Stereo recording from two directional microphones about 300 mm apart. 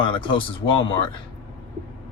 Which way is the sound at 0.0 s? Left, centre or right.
Centre.